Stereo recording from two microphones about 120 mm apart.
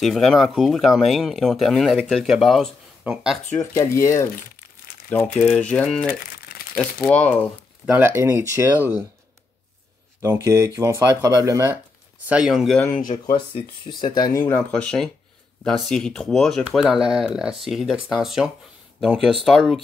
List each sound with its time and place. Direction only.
0.0 s speech: centre (ahead or behind)
3.7 s speech: 25° left (ahead or behind)
5.1 s speech: 10° left (ahead or behind)
8.0 s speech: 20° right (ahead or behind)
10.2 s speech: 25° right (ahead or behind)
12.3 s speech: 5° right (ahead or behind)
12.9 s speech: 45° left (ahead or behind)
14.6 s speech: 5° left (ahead or behind)